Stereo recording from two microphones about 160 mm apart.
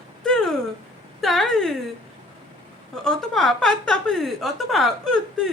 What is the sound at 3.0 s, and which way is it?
A woman's voice, 5° left (ahead or behind).